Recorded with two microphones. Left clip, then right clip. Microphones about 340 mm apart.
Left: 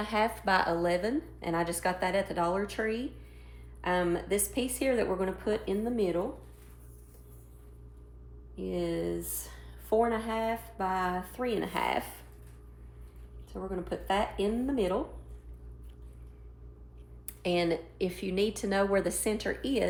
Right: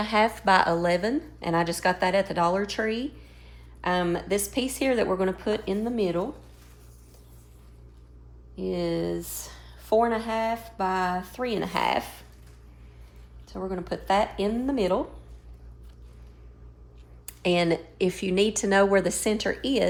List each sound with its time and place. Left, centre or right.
0.0 s speech: right
8.5 s speech: right
13.5 s speech: right
17.2 s speech: right